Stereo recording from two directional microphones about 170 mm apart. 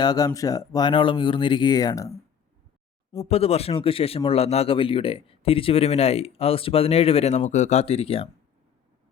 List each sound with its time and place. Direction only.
0.0 s speech: 25° left (ahead or behind)
3.2 s speech: 35° left (ahead or behind)